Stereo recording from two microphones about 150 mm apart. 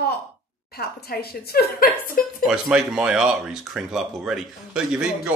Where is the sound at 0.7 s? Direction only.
90° left.